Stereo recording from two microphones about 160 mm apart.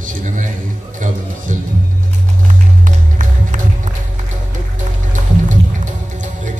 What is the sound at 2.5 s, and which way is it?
Music, 55° right (ahead or behind).